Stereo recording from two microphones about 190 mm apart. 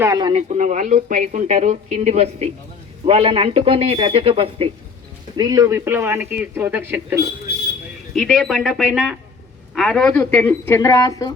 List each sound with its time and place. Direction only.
0.0 s a man's voice: 20° right (ahead or behind)
0.5 s a man's voice: 40° right (ahead or behind); by 7.2 s 10° right (ahead or behind)
8.1 s speech: centre (ahead or behind); by 11.3 s 20° left (ahead or behind)